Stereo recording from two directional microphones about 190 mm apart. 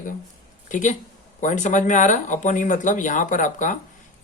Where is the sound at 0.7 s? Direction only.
40° left (ahead or behind).